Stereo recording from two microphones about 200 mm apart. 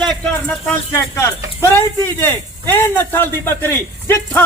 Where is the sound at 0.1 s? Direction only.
5° left (ahead or behind).